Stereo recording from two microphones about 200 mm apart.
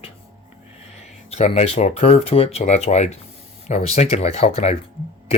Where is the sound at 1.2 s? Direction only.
30° left (ahead or behind).